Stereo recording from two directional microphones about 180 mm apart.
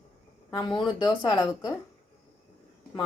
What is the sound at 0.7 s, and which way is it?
Speech, 25° left (ahead or behind).